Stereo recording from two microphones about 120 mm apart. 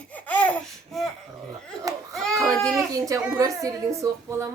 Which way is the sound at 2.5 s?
5° left (ahead or behind).